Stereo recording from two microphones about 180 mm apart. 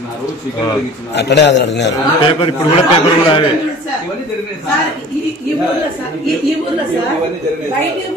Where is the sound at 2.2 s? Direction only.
30° left (ahead or behind).